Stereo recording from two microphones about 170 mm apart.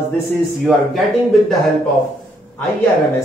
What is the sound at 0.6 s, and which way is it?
Speech, centre (ahead or behind).